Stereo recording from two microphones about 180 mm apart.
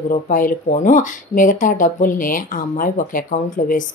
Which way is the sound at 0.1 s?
50° left (ahead or behind).